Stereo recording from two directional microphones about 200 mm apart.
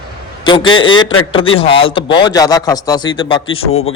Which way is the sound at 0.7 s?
25° left (ahead or behind).